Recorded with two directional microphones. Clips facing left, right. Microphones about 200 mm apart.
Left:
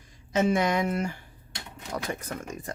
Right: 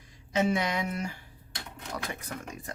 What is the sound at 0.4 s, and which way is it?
Speech, 50° left (ahead or behind).